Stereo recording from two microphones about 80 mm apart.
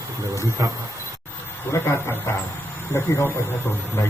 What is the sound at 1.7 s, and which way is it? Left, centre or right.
Speech, left.